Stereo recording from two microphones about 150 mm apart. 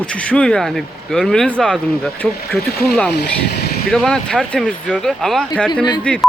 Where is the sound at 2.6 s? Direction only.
90° left.